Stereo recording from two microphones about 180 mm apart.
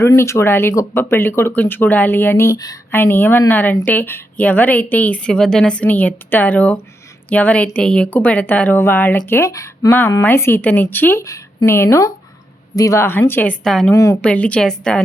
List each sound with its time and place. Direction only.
0.0 s speech: 15° left (ahead or behind)
13.9 s speech: 15° left (ahead or behind)
14.2 s speech: 5° left (ahead or behind)